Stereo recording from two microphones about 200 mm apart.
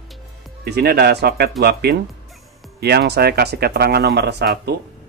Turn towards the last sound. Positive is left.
turn(degrees=-55)  # may be behind; listen again after turning